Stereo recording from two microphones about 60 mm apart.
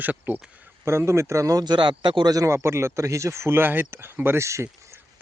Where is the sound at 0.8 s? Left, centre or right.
Right.